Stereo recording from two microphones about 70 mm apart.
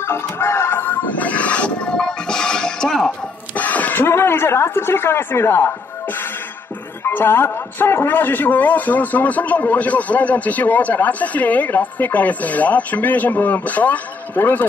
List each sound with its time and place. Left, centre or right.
0.0 s music: left; by 3.1 s centre
3.5 s speech: left
7.0 s speech: left